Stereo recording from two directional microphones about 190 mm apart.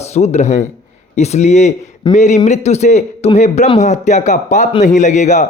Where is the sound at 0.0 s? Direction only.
35° left (ahead or behind).